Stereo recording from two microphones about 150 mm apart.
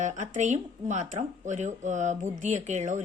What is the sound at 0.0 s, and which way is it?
Speech, 55° right (ahead or behind).